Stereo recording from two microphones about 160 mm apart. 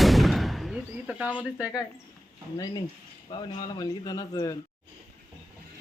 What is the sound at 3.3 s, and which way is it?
Speech, 25° left (ahead or behind).